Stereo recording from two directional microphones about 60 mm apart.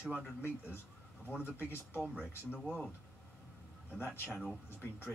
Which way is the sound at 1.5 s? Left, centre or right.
Left.